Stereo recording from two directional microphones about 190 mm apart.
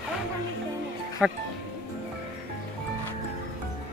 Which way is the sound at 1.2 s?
5° right (ahead or behind).